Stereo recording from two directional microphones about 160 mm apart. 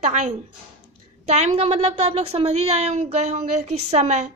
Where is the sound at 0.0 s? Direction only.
50° right (ahead or behind).